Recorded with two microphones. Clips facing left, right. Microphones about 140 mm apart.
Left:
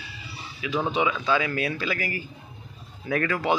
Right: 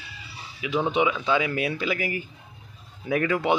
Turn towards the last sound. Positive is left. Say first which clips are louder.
# right 2 dB
turn(degrees=-20)  # may be behind; listen again after turning